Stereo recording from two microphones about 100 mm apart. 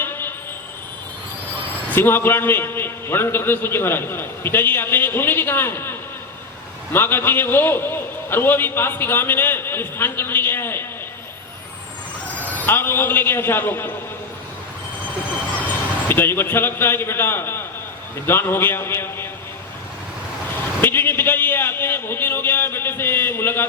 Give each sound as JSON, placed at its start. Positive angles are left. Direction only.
{"t": 0.0, "sound": "train", "side_deg": 20}
{"t": 1.9, "sound": "a man's voice", "side_deg": 20}
{"t": 12.6, "sound": "a man's voice", "side_deg": 20}
{"t": 15.6, "sound": "a man's voice", "side_deg": 20}
{"t": 20.8, "sound": "a man's voice", "side_deg": 20}